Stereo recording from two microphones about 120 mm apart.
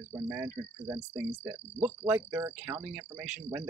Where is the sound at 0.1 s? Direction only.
25° right (ahead or behind).